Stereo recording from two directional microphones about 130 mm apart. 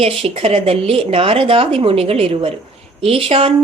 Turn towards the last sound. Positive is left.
turn(degrees=-45)  # may be behind; listen again after turning